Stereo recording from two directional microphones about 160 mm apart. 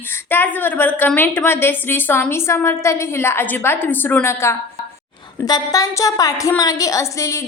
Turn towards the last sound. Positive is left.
turn(degrees=20)  # may be behind; listen again after turning